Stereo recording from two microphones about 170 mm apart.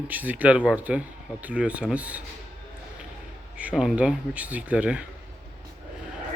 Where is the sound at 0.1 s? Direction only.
10° right (ahead or behind).